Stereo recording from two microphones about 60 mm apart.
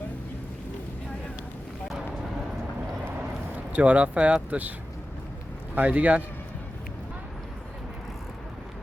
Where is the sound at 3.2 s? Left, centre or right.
Right.